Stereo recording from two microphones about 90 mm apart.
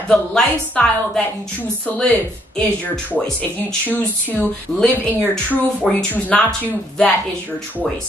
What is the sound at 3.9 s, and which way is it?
Speech, 20° left (ahead or behind).